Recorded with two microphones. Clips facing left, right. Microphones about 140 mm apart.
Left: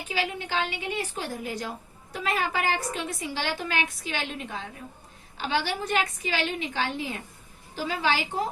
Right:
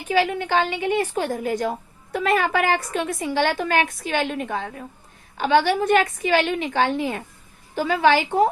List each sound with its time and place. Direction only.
0.1 s a woman's voice: 55° right (ahead or behind)
2.1 s a woman's voice: 65° right (ahead or behind)